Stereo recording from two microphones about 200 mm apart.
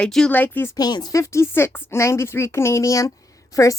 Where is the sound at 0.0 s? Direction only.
5° left (ahead or behind).